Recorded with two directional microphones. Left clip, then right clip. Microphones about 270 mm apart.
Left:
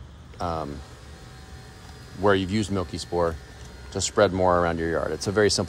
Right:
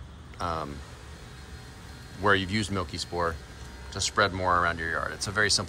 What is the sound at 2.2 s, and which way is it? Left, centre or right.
Speech, left.